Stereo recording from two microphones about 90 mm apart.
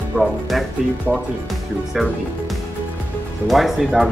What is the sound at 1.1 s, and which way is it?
Speech, 20° right (ahead or behind).